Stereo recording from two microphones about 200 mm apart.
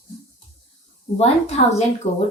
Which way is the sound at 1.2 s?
35° left (ahead or behind).